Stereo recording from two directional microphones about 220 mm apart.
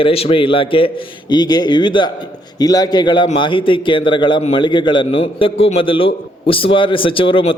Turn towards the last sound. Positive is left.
turn(degrees=25)  # may be behind; listen again after turning